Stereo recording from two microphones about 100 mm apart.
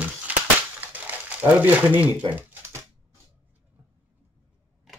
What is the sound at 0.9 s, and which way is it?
Crumpling, 15° right (ahead or behind).